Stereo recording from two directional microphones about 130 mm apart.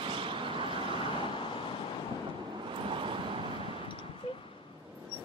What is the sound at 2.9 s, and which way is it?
Vehicle, 40° right (ahead or behind).